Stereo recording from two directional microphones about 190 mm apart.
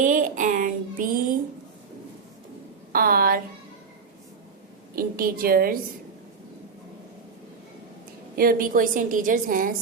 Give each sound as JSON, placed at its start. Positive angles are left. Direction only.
{"t": 0.0, "sound": "a sound", "side_deg": -45}
{"t": 2.9, "sound": "a woman's voice", "side_deg": -50}
{"t": 4.9, "sound": "a woman's voice", "side_deg": -50}
{"t": 8.4, "sound": "a woman's voice", "side_deg": -50}